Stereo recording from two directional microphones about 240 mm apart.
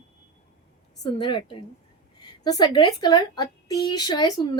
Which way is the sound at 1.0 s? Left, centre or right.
Centre.